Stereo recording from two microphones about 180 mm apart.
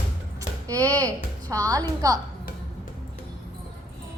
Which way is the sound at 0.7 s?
20° right (ahead or behind).